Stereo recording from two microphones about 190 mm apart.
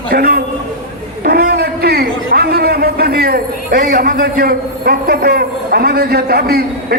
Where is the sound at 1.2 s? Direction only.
55° right (ahead or behind).